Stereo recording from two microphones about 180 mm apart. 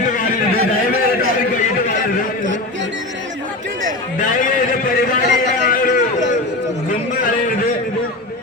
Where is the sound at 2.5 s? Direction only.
90° right.